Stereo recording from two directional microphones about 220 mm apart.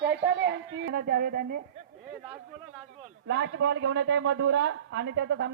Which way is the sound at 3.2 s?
50° right (ahead or behind).